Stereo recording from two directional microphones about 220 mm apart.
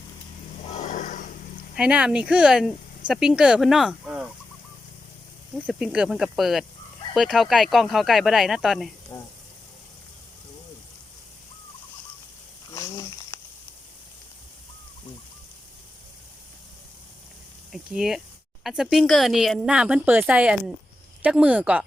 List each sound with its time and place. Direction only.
0.6 s vehicle: 30° left (ahead or behind)
1.7 s speech: 5° right (ahead or behind)
5.5 s speech: 5° right (ahead or behind)
9.1 s speech: 15° left (ahead or behind)
12.7 s a sound: 15° left (ahead or behind)
17.7 s a sound: 5° right (ahead or behind)
18.6 s speech: centre (ahead or behind)